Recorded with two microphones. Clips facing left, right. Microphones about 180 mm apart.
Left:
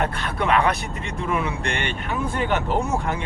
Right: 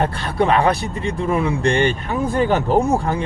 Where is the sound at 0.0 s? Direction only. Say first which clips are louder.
Right 5 dB; 30° right (ahead or behind).